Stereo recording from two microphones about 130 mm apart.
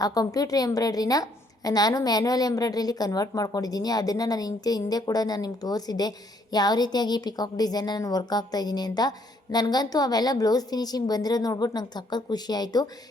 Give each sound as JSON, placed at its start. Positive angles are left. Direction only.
{"t": 0.0, "sound": "a woman's voice", "side_deg": 30}